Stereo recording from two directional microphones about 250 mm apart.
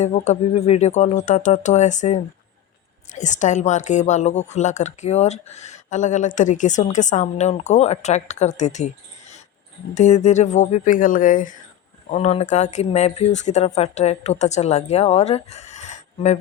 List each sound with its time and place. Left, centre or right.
0.0 s a woman's voice: left
9.9 s a woman's voice: left